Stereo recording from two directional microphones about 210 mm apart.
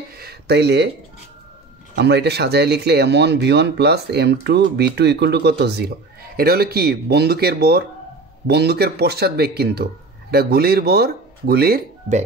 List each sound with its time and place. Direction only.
0.2 s speech: 50° right (ahead or behind)
2.0 s speech: 50° right (ahead or behind)